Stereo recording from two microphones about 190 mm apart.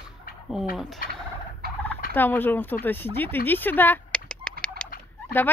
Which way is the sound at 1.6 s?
55° right (ahead or behind).